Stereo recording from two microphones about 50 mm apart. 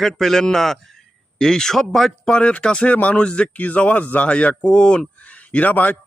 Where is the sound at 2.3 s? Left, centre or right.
Left.